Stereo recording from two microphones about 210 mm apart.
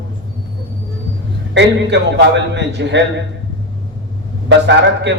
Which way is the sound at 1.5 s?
55° right (ahead or behind).